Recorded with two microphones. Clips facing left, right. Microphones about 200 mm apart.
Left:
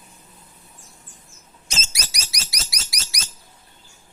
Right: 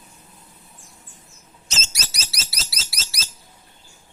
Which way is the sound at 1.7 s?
10° left (ahead or behind).